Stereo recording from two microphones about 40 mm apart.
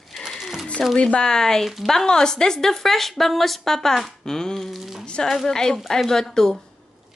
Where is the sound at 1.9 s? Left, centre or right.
Centre.